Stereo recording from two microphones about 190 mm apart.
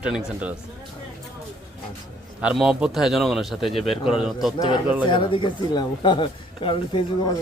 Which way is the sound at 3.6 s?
30° left (ahead or behind).